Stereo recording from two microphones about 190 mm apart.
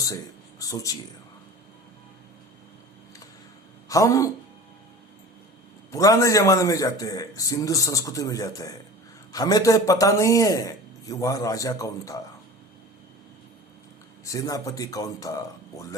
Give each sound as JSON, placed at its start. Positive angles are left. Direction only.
{"t": 0.6, "sound": "speech", "side_deg": 20}
{"t": 3.8, "sound": "speech", "side_deg": 15}
{"t": 5.9, "sound": "speech", "side_deg": 15}
{"t": 14.3, "sound": "a man's voice", "side_deg": 20}